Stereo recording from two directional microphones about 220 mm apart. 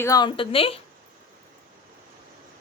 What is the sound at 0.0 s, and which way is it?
Speech, 15° left (ahead or behind).